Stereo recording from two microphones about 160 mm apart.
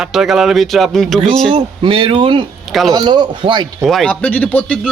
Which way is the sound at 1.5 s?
30° right (ahead or behind).